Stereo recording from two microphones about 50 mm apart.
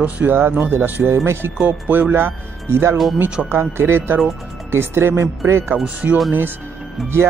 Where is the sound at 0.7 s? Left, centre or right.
Right.